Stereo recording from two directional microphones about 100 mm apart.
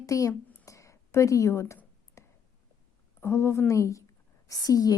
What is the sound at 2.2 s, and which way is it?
Clicking, 30° left (ahead or behind).